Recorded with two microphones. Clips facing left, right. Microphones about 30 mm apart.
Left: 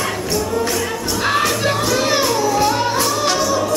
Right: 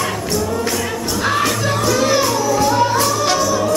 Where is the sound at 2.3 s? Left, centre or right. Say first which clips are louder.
Even; left.